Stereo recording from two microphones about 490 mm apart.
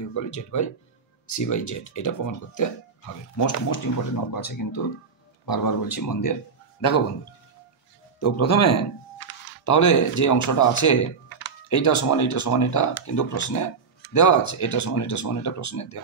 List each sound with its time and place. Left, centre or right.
0.1 s speech: left
8.2 s speech: left